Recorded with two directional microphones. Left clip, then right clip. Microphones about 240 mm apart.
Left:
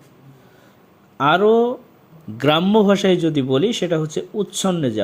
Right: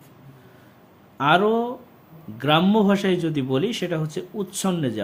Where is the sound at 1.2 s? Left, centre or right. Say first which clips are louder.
Left 4 dB; centre.